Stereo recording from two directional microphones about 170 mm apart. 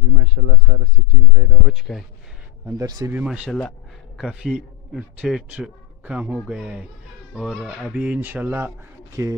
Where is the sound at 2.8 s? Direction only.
25° right (ahead or behind).